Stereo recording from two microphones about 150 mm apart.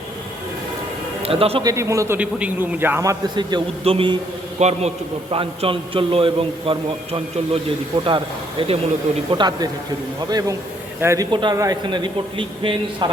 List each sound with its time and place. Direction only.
1.2 s a man's voice: 40° right (ahead or behind)
1.6 s a man's voice: 20° right (ahead or behind)
2.1 s a man's voice: 10° right (ahead or behind); by 4.2 s 35° right (ahead or behind)
4.6 s a man's voice: 50° right (ahead or behind)
5.3 s a man's voice: 35° right (ahead or behind)
11.0 s a man's voice: 20° right (ahead or behind)
11.3 s a man's voice: 30° right (ahead or behind)